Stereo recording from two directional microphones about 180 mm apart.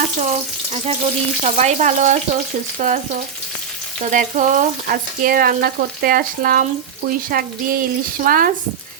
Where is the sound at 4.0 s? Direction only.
45° right (ahead or behind).